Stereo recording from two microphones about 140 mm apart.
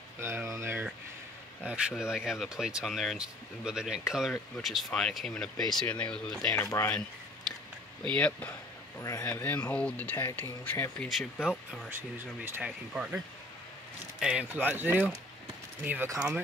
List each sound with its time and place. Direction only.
0.2 s speech: 15° right (ahead or behind); by 6.5 s 5° left (ahead or behind)
6.5 s speech: 20° left (ahead or behind)
8.1 s speech: 10° left (ahead or behind)
9.0 s speech: 25° left (ahead or behind)
11.4 s speech: centre (ahead or behind)
14.2 s speech: 10° right (ahead or behind)